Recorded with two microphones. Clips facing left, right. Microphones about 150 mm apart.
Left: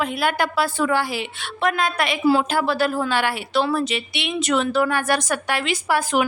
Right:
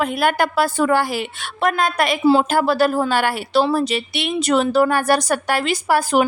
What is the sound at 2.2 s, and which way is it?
Speech, 25° right (ahead or behind).